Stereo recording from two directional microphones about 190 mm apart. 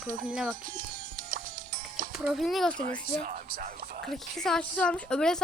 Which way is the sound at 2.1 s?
Centre (ahead or behind).